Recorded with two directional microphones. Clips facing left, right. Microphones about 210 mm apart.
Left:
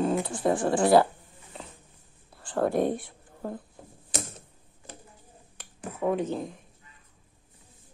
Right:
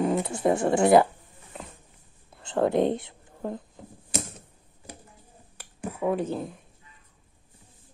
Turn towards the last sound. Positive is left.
turn(degrees=-5)  # may be behind; listen again after turning